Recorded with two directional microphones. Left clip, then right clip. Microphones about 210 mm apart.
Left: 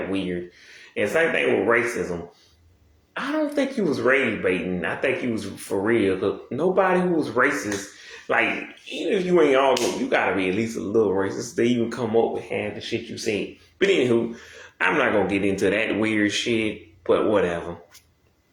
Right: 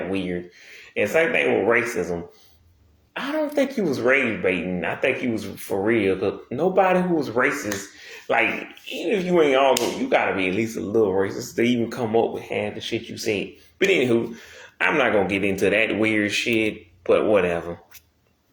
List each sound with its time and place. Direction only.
0.1 s speech: 35° right (ahead or behind)
3.2 s speech: 30° right (ahead or behind)